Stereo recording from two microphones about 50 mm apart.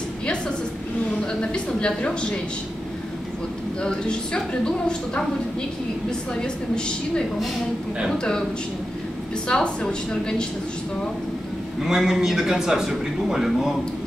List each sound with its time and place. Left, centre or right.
1.4 s a woman's voice: centre
3.8 s a woman's voice: centre
9.5 s a woman's voice: left
11.8 s a man's voice: centre